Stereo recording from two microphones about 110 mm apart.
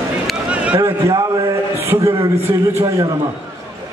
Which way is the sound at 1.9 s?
30° right (ahead or behind).